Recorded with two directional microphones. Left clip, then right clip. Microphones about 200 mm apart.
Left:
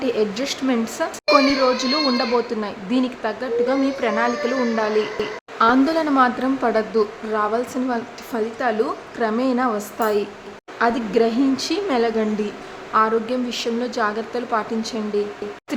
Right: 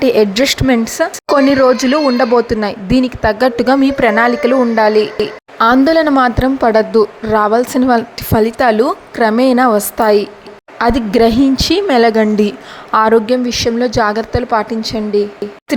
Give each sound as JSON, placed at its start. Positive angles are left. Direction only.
{"t": 0.0, "sound": "a woman's voice", "side_deg": -40}